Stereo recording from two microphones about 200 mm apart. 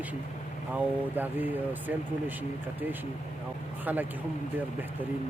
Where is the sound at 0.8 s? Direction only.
10° right (ahead or behind).